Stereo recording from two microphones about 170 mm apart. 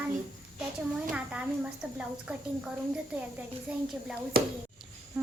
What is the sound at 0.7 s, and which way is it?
A woman's voice, 5° right (ahead or behind).